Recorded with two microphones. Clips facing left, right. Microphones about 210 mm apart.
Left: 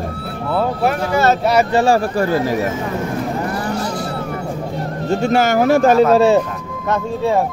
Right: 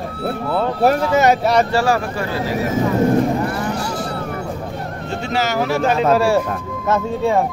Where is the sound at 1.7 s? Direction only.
25° left (ahead or behind).